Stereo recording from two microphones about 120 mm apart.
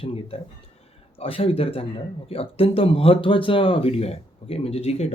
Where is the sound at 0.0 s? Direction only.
50° left (ahead or behind).